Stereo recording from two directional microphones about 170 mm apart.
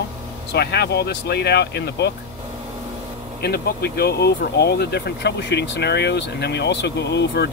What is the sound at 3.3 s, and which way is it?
Speech, 70° left (ahead or behind).